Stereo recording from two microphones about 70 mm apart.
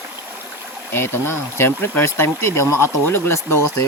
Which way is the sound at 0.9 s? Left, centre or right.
Left.